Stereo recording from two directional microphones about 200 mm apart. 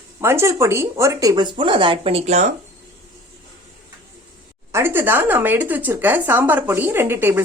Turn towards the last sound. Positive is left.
turn(degrees=-10)  # may be behind; listen again after turning